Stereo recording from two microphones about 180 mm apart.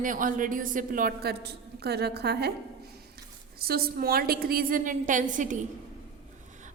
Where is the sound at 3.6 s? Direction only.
60° right (ahead or behind).